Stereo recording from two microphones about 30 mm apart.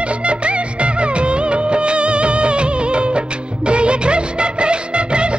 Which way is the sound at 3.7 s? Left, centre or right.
Right.